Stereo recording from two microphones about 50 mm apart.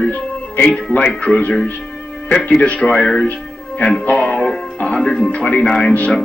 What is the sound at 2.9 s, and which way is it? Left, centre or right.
Speech, centre.